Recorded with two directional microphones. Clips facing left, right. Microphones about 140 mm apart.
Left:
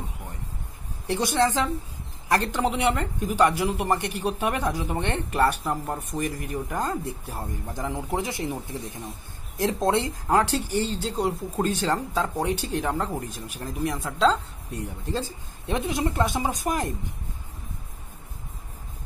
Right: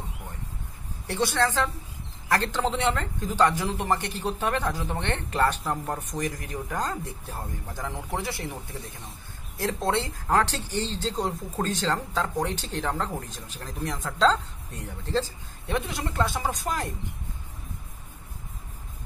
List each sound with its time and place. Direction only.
1.0 s speech: 15° left (ahead or behind)
9.6 s speech: 20° left (ahead or behind)
15.6 s speech: 20° left (ahead or behind)